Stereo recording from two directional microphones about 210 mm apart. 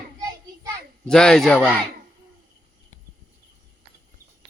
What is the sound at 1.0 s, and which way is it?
Speech, 5° left (ahead or behind).